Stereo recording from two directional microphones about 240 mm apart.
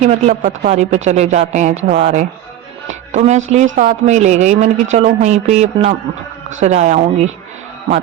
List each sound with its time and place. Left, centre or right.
0.0 s speech: right